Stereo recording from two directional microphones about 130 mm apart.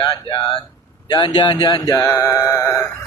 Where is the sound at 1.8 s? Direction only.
25° left (ahead or behind).